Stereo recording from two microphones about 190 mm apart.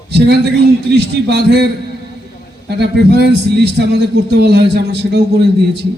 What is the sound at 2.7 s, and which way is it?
A man's voice, 60° right (ahead or behind).